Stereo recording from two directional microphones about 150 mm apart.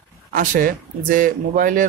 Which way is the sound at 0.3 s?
65° right (ahead or behind).